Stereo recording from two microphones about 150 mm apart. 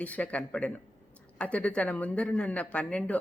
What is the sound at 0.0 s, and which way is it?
Speech, 10° left (ahead or behind).